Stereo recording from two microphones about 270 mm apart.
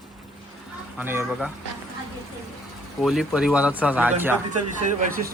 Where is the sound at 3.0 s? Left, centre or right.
Centre.